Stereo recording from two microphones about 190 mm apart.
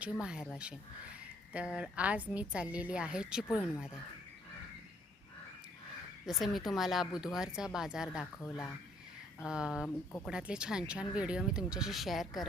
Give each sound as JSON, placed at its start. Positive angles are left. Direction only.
{"t": 0.0, "sound": "speech", "side_deg": -5}
{"t": 1.5, "sound": "a woman's voice", "side_deg": -5}
{"t": 3.4, "sound": "speech", "side_deg": 10}
{"t": 6.2, "sound": "speech", "side_deg": 0}